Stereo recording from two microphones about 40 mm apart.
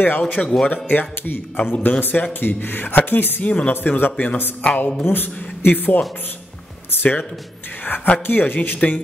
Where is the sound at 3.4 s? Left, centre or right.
Left.